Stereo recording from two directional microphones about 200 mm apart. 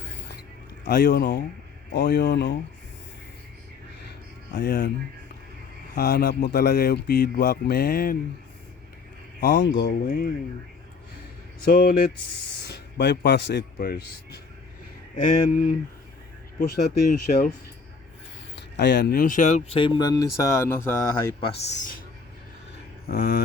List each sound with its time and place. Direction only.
0.9 s speech: 55° left (ahead or behind)
4.5 s speech: 55° left (ahead or behind)
5.9 s speech: 55° left (ahead or behind)
9.4 s speech: 60° left (ahead or behind)
10.1 s speech: 50° left (ahead or behind)
11.7 s speech: 50° left (ahead or behind)
15.3 s speech: 40° left (ahead or behind)
18.5 s speech: 60° left (ahead or behind); by 20.9 s 10° left (ahead or behind)
21.4 s speech: 35° left (ahead or behind)
23.0 s speech: 50° left (ahead or behind)